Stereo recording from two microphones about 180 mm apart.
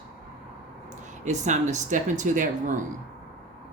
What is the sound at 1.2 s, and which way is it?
Speech, 40° right (ahead or behind).